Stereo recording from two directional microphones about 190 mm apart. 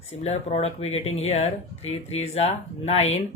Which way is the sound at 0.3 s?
35° left (ahead or behind).